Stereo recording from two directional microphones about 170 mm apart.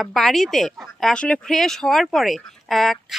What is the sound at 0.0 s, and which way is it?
Speech, centre (ahead or behind).